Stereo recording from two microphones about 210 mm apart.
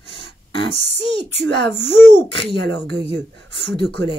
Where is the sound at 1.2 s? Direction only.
55° right (ahead or behind).